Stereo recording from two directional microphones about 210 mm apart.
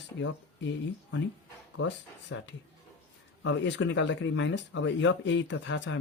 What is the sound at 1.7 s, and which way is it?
Speech, 60° left (ahead or behind).